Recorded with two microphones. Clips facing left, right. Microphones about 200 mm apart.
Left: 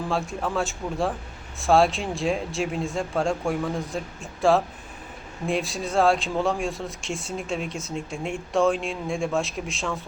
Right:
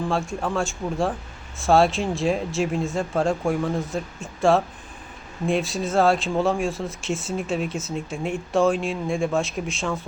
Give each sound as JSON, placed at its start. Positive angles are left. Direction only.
{"t": 0.1, "sound": "speech", "side_deg": 0}